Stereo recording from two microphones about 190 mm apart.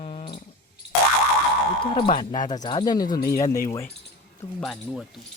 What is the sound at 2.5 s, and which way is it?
Speech, 25° left (ahead or behind).